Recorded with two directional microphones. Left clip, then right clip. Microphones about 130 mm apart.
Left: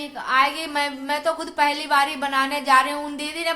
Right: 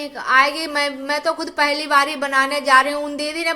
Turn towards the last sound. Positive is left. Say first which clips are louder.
# right 4 dB
turn(degrees=-30)  # may be behind; listen again after turning